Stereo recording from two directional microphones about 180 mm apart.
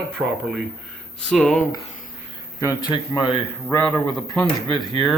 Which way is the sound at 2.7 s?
25° left (ahead or behind).